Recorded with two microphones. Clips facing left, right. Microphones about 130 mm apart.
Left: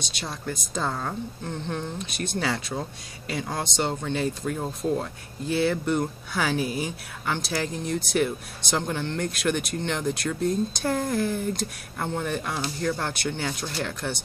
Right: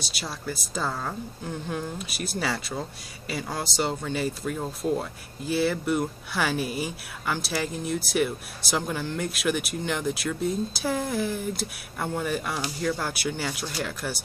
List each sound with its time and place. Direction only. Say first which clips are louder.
0.0 s speech: left 1 dB; 5° right (ahead or behind)